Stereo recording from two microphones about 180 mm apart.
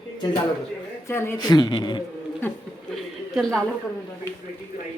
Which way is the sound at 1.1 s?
15° left (ahead or behind).